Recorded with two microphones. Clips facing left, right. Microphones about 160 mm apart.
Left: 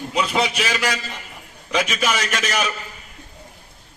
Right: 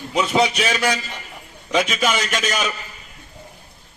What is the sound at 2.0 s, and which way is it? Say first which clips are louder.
Speech: right 1 dB; 25° right (ahead or behind).